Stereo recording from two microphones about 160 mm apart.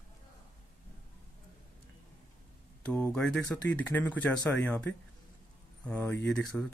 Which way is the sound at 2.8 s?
5° left (ahead or behind).